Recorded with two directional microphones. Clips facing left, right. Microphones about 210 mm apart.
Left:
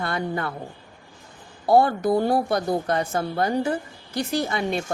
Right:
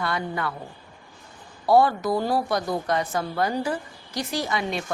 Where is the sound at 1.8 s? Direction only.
50° left (ahead or behind).